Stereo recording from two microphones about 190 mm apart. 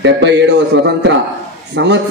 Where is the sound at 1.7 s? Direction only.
65° right (ahead or behind).